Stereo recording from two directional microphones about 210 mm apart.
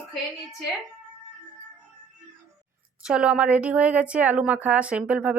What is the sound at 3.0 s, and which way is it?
Speech, 5° right (ahead or behind).